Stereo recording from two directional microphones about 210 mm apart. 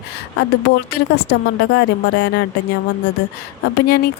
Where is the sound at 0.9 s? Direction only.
55° left (ahead or behind).